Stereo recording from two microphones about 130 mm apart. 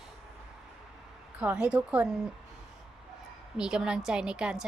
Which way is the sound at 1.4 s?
10° right (ahead or behind).